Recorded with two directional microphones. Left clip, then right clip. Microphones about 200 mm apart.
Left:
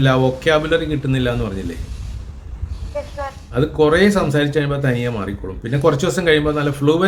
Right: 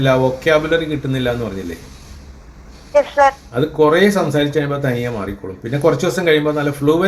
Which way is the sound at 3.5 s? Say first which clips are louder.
Right 2 dB; 15° left (ahead or behind).